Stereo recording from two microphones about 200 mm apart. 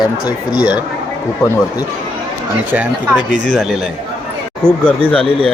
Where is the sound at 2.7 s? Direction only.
10° right (ahead or behind).